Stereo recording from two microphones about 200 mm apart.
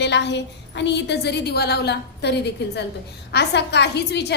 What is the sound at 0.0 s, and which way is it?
A woman's voice, 60° left (ahead or behind).